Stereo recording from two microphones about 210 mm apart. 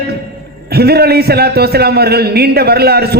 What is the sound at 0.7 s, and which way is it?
A man's voice, 50° right (ahead or behind).